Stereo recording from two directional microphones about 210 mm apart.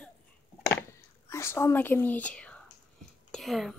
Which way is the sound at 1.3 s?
15° left (ahead or behind).